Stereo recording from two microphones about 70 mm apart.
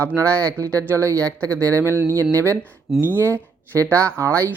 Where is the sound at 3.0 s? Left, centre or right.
Right.